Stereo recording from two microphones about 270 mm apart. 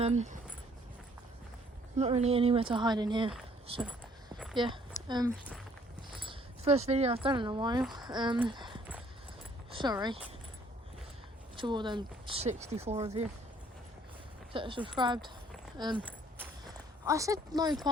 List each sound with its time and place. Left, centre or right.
0.0 s speech: right
2.0 s speech: right
4.5 s speech: centre
11.5 s speech: centre
14.5 s speech: centre